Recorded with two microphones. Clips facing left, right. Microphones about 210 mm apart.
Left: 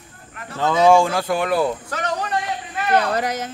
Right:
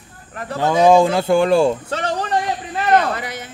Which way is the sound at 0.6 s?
15° right (ahead or behind).